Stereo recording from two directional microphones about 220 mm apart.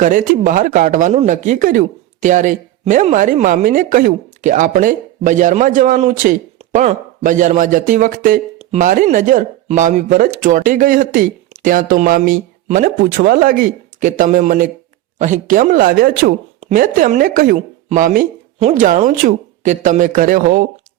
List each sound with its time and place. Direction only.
0.0 s speech: 35° right (ahead or behind)